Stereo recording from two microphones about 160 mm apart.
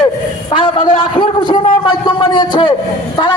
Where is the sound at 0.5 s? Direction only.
35° left (ahead or behind).